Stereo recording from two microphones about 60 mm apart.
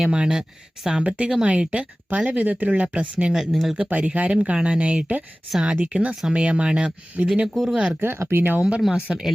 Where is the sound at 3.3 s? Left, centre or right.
Centre.